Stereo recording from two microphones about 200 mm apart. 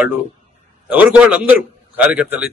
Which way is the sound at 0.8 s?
5° right (ahead or behind).